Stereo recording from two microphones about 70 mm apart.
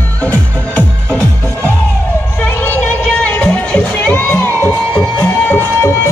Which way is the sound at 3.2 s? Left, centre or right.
Left.